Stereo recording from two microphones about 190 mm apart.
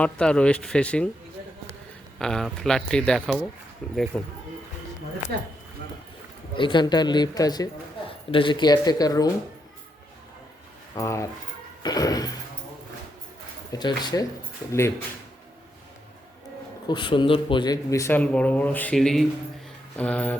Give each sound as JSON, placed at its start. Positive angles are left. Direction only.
{"t": 0.0, "sound": "speech", "side_deg": 5}
{"t": 2.1, "sound": "speech", "side_deg": 5}
{"t": 6.6, "sound": "speech", "side_deg": 25}
{"t": 10.9, "sound": "speech", "side_deg": 15}
{"t": 13.7, "sound": "speech", "side_deg": 20}
{"t": 16.9, "sound": "speech", "side_deg": 25}